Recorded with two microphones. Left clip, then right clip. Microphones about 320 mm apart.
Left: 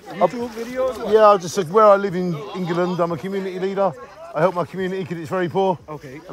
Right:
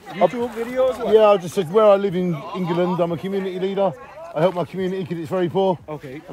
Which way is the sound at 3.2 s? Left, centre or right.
Left.